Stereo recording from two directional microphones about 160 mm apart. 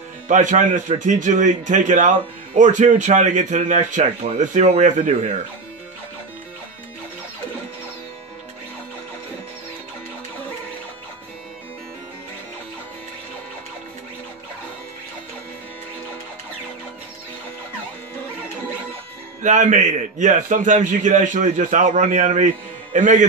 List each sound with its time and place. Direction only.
0.3 s a man's voice: 50° right (ahead or behind)
19.4 s a man's voice: 50° right (ahead or behind)